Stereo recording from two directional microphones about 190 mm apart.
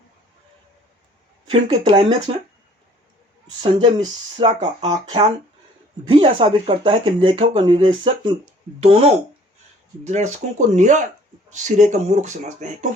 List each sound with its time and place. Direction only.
1.5 s speech: 25° right (ahead or behind)
3.6 s speech: 25° right (ahead or behind)